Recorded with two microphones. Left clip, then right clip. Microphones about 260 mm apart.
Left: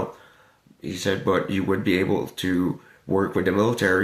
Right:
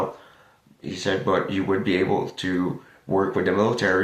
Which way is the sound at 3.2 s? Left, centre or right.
Left.